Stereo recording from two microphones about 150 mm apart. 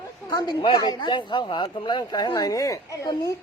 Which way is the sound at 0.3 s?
30° left (ahead or behind).